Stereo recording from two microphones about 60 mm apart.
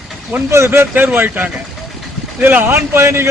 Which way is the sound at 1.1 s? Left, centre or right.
Right.